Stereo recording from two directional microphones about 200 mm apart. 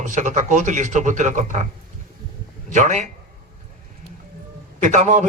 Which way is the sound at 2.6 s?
40° right (ahead or behind).